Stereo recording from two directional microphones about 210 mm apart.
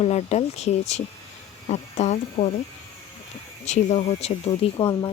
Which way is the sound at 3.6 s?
30° left (ahead or behind).